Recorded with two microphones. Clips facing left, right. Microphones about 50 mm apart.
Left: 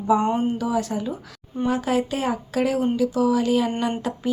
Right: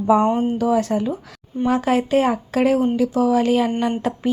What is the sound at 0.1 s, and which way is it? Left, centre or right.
Speech, right.